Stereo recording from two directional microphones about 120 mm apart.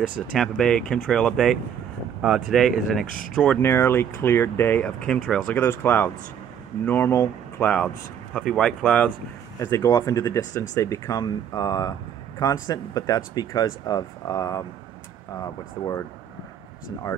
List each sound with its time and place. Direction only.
0.6 s speech: 5° left (ahead or behind)
3.6 s speech: 20° left (ahead or behind)
4.8 s speech: 10° left (ahead or behind)
8.4 s speech: 5° left (ahead or behind)
9.6 s speech: 25° left (ahead or behind)